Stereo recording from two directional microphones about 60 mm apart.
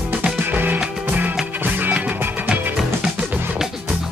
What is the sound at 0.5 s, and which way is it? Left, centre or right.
Music, right.